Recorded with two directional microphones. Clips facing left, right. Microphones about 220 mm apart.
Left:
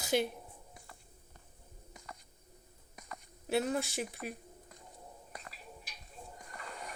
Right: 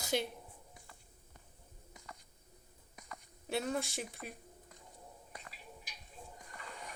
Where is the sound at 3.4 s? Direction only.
5° left (ahead or behind).